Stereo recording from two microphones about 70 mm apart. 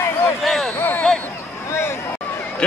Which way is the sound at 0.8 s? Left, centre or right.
Left.